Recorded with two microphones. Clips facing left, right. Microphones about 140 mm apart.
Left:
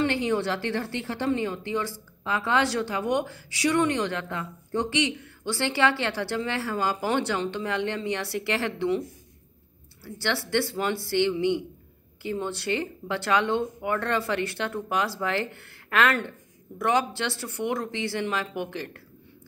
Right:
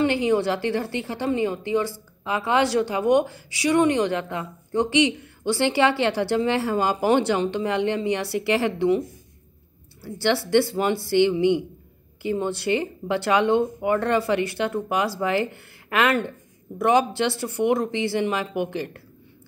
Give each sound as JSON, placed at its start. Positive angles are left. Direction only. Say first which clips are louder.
{"t": 0.0, "sound": "a woman's voice", "louder": "right 4 dB", "side_deg": -15}
{"t": 10.2, "sound": "a woman's voice", "louder": "right 7 dB", "side_deg": -15}